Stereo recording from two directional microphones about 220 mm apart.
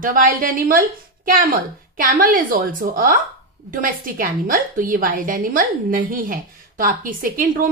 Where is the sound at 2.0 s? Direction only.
40° right (ahead or behind).